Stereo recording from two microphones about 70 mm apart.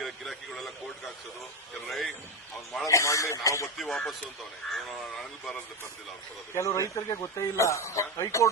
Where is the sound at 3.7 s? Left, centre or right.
Centre.